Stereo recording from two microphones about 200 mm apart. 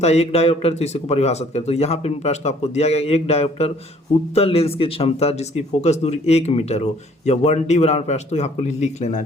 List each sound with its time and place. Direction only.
0.0 s speech: 35° left (ahead or behind)